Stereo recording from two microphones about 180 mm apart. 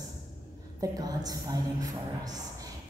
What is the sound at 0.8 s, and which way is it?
A woman's voice, 20° right (ahead or behind).